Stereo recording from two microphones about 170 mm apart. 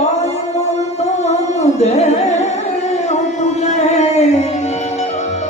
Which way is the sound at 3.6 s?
40° left (ahead or behind).